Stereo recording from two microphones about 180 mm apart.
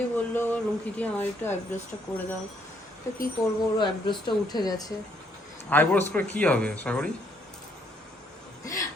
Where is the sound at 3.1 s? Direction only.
15° left (ahead or behind).